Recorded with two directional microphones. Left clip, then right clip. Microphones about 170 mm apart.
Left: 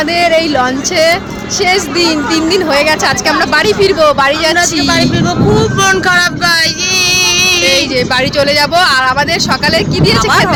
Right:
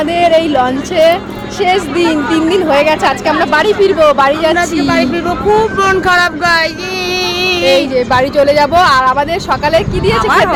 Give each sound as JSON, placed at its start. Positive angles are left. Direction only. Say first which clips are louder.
{"t": 0.2, "sound": "a woman's voice", "louder": "right 1 dB", "side_deg": 0}
{"t": 5.5, "sound": "speech", "louder": "even", "side_deg": -15}
{"t": 7.1, "sound": "music", "louder": "left 2 dB", "side_deg": -40}
{"t": 7.9, "sound": "speech", "louder": "right 1 dB", "side_deg": -15}
{"t": 10.2, "sound": "a woman's voice", "louder": "right 1 dB", "side_deg": 10}